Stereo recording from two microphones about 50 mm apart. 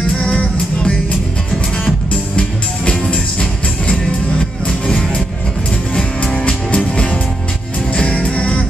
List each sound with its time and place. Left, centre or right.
0.2 s music: centre
2.3 s music: left